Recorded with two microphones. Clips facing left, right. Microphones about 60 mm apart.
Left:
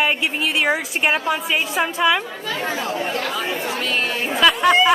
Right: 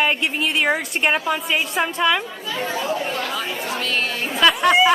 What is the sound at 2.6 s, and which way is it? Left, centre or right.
Speech, left.